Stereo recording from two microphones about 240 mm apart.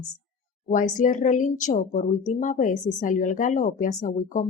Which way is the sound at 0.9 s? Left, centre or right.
Left.